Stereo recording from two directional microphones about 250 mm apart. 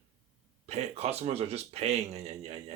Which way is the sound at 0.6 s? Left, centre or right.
Right.